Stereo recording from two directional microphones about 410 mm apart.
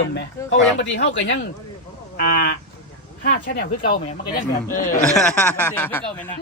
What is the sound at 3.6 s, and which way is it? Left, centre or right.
Speech, left.